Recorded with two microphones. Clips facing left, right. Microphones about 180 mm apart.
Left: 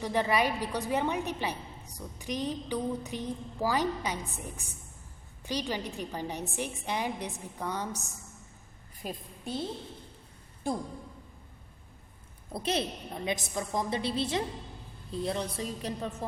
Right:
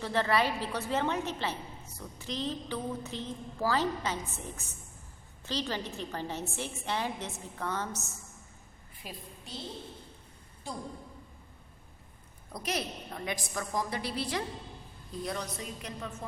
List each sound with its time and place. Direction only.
0.0 s a woman's voice: 15° left (ahead or behind)
9.0 s a woman's voice: 50° left (ahead or behind)
10.7 s speech: 55° left (ahead or behind)
12.5 s a woman's voice: 25° left (ahead or behind)